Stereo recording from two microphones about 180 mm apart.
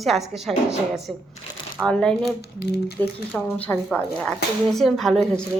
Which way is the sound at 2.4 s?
65° left (ahead or behind).